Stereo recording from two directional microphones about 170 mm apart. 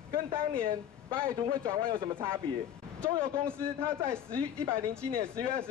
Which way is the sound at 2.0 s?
15° right (ahead or behind).